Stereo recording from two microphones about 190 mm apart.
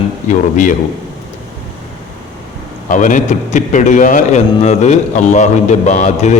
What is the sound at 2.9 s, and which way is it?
A man's voice, 40° left (ahead or behind).